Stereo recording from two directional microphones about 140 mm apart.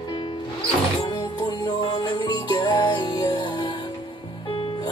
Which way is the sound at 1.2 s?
30° left (ahead or behind).